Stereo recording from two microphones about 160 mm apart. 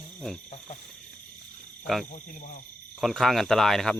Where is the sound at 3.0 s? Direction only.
Centre (ahead or behind).